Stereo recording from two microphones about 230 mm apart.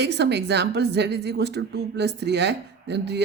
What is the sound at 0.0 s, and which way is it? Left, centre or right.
A woman's voice, right.